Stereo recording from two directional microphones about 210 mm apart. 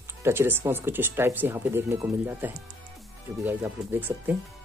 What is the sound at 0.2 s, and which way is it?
Speech, 10° right (ahead or behind).